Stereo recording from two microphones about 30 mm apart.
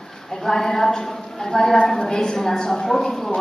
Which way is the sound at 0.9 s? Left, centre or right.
Centre.